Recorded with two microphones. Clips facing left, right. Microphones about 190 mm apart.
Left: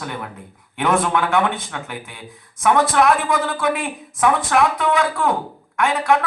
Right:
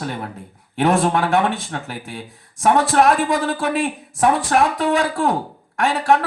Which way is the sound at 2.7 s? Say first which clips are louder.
Right 1 dB; 35° right (ahead or behind).